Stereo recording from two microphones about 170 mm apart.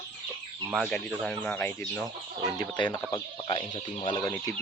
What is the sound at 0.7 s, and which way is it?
Speech, centre (ahead or behind).